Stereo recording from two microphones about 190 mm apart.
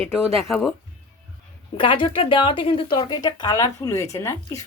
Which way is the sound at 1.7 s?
25° left (ahead or behind).